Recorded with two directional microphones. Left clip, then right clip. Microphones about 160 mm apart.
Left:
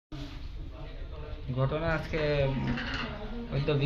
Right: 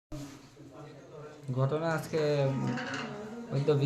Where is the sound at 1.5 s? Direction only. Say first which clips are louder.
Left 1 dB; 20° right (ahead or behind).